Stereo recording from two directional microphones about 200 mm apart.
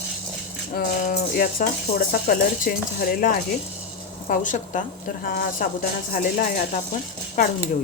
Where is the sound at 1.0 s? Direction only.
45° left (ahead or behind).